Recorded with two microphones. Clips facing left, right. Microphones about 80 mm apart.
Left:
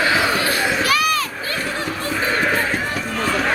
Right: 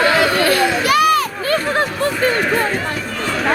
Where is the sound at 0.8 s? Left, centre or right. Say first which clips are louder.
Right 8 dB; right.